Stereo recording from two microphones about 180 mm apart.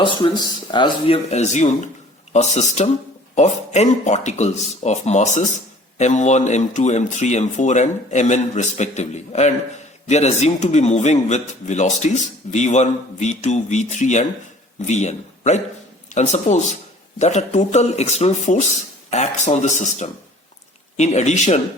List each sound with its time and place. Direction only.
0.0 s a man's voice: 25° left (ahead or behind); by 21.6 s 40° left (ahead or behind)